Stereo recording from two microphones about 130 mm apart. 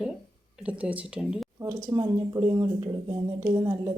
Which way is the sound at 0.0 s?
5° right (ahead or behind).